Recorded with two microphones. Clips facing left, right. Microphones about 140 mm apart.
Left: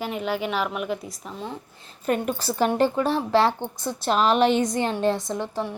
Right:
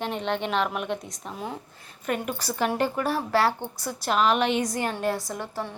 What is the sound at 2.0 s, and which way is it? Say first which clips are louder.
A woman's voice: left 4 dB; 35° left (ahead or behind).